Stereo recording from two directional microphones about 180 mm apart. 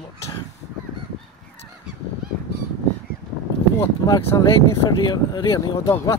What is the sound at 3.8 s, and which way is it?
Speech, 20° left (ahead or behind).